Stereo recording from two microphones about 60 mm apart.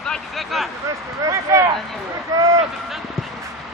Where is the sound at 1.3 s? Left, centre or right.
Right.